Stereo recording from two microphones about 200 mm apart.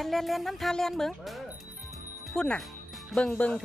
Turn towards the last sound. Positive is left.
turn(degrees=5)  # may be behind; listen again after turning